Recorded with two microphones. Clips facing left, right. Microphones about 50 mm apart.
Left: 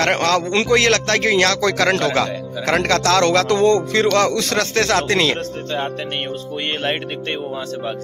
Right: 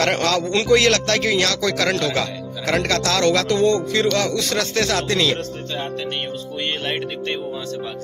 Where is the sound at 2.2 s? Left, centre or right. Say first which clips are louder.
Left 3 dB; left.